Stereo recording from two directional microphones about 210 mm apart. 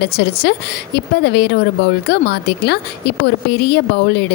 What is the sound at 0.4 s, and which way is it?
Speech, 50° left (ahead or behind).